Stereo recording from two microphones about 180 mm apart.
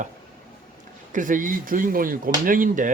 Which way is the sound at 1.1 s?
45° right (ahead or behind).